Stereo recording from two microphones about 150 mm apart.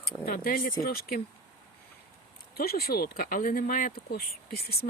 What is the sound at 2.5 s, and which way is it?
Speech, 90° left.